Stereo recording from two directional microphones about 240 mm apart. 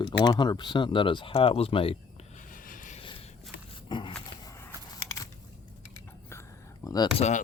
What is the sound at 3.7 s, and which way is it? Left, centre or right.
Dog, left.